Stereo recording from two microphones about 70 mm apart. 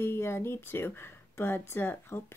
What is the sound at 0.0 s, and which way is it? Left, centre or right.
Speech, left.